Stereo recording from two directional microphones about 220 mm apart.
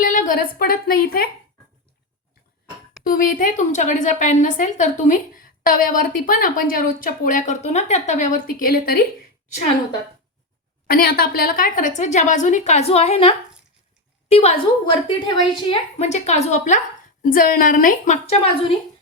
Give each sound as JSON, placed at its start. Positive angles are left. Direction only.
{"t": 0.0, "sound": "a woman's voice", "side_deg": 35}
{"t": 3.0, "sound": "a woman's voice", "side_deg": 40}
{"t": 10.8, "sound": "a woman's voice", "side_deg": 45}